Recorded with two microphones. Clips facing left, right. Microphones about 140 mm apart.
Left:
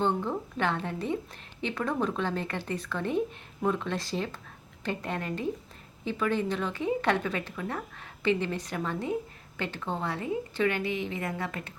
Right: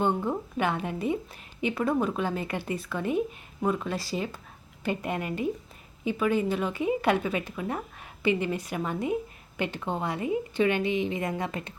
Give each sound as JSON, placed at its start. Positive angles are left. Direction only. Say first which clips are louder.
{"t": 0.0, "sound": "a woman's voice", "louder": "right 2 dB", "side_deg": -10}